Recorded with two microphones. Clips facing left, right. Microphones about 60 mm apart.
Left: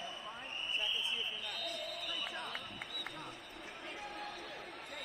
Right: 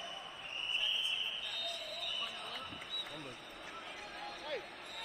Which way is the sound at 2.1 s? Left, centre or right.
Left.